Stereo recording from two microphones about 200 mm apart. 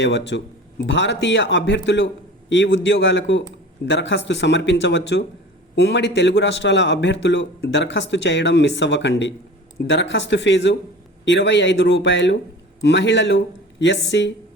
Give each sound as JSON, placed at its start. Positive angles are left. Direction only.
{"t": 0.0, "sound": "a man's voice", "side_deg": 65}